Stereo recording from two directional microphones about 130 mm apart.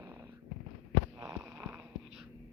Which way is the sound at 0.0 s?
25° right (ahead or behind).